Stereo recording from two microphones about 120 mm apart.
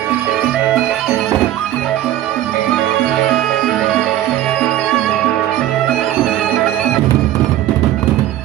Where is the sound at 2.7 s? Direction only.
5° left (ahead or behind).